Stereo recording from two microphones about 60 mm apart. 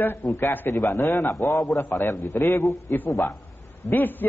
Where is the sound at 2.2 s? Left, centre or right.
Left.